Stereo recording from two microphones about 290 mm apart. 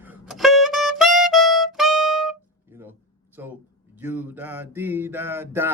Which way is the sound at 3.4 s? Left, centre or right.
Centre.